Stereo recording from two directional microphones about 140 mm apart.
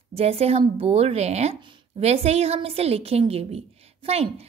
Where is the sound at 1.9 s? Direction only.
50° right (ahead or behind).